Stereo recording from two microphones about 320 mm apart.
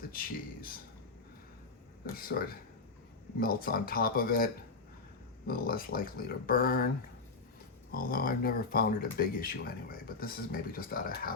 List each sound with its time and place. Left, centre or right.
0.1 s speech: left
2.1 s speech: left
5.5 s speech: left
7.9 s speech: left